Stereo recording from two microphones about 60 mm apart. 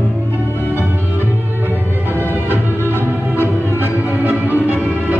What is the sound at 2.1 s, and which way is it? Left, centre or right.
Music, right.